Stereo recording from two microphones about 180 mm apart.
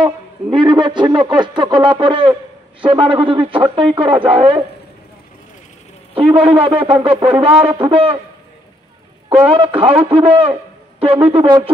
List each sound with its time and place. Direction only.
0.0 s speech: 25° right (ahead or behind)
6.1 s a man's voice: 30° right (ahead or behind)
9.5 s a man's voice: 30° right (ahead or behind)